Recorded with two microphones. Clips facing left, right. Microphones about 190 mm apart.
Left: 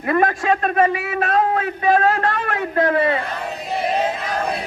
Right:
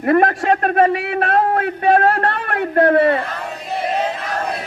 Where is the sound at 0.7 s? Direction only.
60° right (ahead or behind).